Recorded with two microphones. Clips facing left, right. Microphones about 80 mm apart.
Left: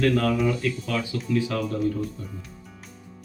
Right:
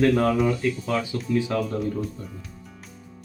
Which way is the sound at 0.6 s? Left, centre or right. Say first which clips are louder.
Right 2 dB; right.